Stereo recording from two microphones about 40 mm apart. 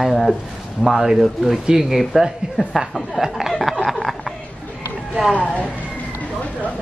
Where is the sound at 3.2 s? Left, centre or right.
Centre.